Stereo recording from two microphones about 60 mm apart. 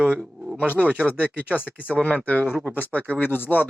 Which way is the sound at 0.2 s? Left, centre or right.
Centre.